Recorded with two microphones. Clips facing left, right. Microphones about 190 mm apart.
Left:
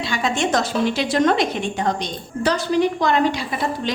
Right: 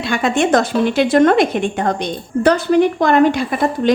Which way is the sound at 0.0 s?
55° right (ahead or behind).